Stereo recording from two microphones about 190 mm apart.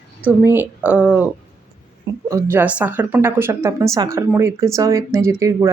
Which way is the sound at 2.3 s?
10° right (ahead or behind).